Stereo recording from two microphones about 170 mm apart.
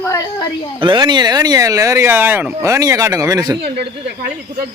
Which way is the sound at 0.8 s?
25° right (ahead or behind).